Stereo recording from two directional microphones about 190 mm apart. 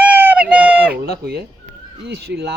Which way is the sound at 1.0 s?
55° right (ahead or behind).